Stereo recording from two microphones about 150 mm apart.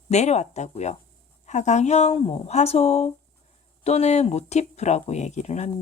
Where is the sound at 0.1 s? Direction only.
50° left (ahead or behind).